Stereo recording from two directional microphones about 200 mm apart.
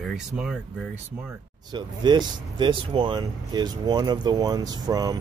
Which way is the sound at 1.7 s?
20° right (ahead or behind).